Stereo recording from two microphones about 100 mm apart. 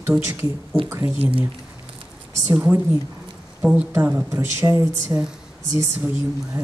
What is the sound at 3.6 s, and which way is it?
A woman's voice, 15° right (ahead or behind).